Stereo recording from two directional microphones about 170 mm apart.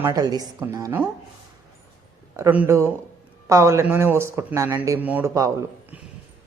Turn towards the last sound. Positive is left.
turn(degrees=-20)  # may be behind; listen again after turning